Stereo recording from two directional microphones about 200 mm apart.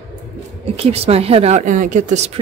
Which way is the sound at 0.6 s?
30° right (ahead or behind).